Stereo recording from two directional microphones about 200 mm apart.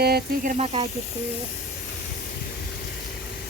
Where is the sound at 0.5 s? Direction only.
30° right (ahead or behind).